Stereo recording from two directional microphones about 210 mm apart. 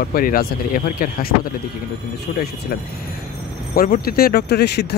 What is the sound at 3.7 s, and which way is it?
Speech, 45° left (ahead or behind).